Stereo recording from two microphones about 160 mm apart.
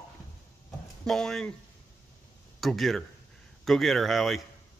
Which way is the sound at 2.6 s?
Centre (ahead or behind).